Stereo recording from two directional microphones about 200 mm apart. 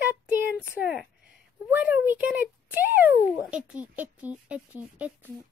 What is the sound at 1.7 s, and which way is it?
A child's voice, 5° right (ahead or behind).